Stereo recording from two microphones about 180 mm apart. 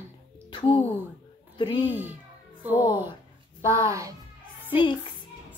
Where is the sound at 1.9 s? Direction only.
10° right (ahead or behind).